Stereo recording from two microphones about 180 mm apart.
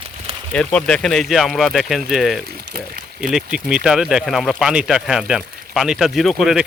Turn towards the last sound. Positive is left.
turn(degrees=0)  # may be behind; listen again after turning